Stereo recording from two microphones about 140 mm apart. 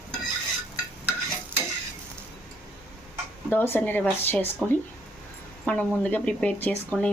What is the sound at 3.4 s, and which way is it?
Speech, 15° left (ahead or behind).